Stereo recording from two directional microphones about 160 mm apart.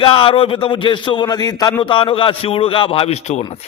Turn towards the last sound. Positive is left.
turn(degrees=40)  # may be behind; listen again after turning